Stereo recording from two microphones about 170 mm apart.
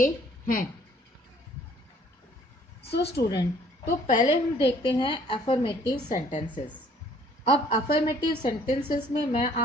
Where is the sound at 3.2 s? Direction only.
75° left (ahead or behind).